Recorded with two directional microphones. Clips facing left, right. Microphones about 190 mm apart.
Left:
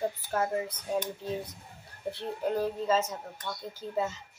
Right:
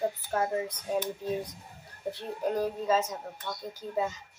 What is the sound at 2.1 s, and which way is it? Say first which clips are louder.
A woman's voice: even; 15° right (ahead or behind).